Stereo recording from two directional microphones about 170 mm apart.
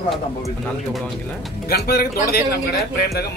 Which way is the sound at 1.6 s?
70° left (ahead or behind).